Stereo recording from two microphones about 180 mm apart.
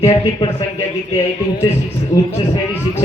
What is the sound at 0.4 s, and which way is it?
A man's voice, 15° left (ahead or behind).